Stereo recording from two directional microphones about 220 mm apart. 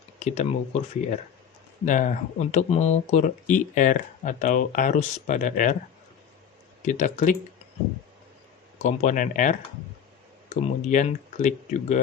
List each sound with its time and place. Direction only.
0.2 s speech: 30° left (ahead or behind)
6.8 s speech: 35° left (ahead or behind)
8.8 s speech: 30° left (ahead or behind)